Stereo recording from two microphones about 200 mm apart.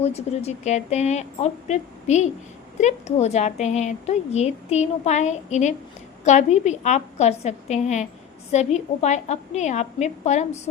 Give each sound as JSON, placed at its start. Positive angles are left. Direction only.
{"t": 0.0, "sound": "a woman's voice", "side_deg": 30}